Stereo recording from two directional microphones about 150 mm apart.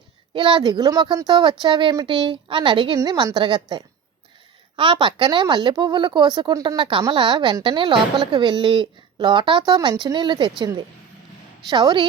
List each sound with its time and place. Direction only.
0.3 s a woman's voice: 35° right (ahead or behind)
11.7 s a woman's voice: 30° right (ahead or behind)